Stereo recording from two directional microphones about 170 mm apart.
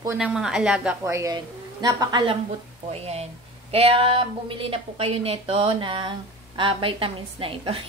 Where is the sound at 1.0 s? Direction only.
20° right (ahead or behind).